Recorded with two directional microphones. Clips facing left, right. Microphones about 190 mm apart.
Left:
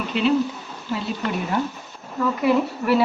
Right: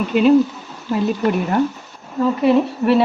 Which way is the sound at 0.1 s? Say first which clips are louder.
Right 7 dB; 50° right (ahead or behind).